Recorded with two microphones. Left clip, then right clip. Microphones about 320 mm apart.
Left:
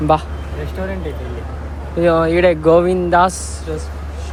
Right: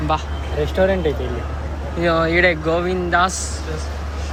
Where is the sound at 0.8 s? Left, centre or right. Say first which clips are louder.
Right 10 dB; right.